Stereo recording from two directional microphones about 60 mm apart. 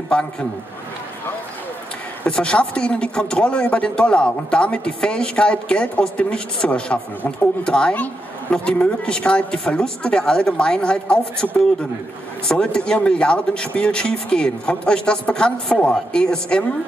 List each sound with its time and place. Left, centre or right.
0.1 s speech: centre
2.2 s speech: centre